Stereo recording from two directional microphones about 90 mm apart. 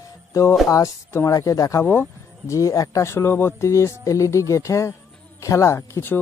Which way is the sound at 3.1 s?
25° left (ahead or behind).